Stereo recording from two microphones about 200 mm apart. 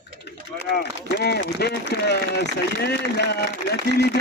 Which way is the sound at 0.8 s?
55° left (ahead or behind).